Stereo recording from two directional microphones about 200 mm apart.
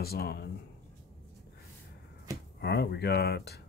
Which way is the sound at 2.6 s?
55° left (ahead or behind).